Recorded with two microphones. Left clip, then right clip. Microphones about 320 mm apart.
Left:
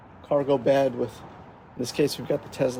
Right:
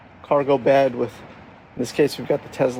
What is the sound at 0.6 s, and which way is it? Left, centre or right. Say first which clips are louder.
Speech: right 5 dB; centre.